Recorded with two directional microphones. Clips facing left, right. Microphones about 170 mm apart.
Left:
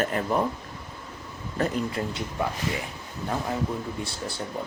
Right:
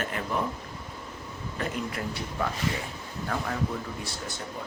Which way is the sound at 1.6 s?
40° left (ahead or behind).